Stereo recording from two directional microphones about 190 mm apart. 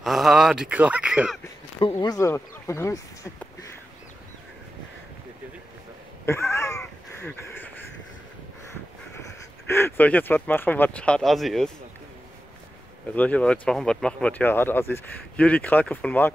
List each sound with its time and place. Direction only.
0.0 s speech: centre (ahead or behind)
1.8 s speech: 20° left (ahead or behind)
6.2 s cat: 15° left (ahead or behind)
7.2 s a sound: 10° left (ahead or behind)
9.7 s speech: 10° left (ahead or behind)
13.1 s speech: 10° left (ahead or behind)